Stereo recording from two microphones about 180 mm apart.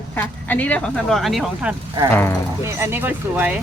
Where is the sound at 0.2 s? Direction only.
10° left (ahead or behind).